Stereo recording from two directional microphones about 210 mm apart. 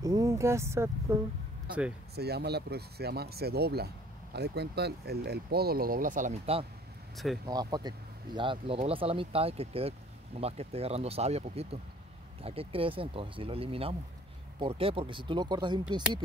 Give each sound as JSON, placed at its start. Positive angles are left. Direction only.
{"t": 0.0, "sound": "speech", "side_deg": -15}
{"t": 2.1, "sound": "speech", "side_deg": -50}
{"t": 7.4, "sound": "speech", "side_deg": -20}